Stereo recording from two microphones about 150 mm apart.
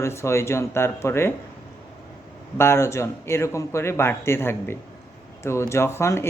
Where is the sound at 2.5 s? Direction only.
15° left (ahead or behind).